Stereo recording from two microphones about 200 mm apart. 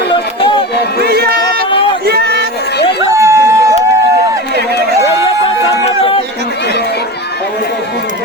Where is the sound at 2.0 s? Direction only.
50° right (ahead or behind).